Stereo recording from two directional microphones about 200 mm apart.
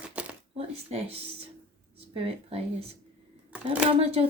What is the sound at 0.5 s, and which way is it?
Speech, 30° right (ahead or behind).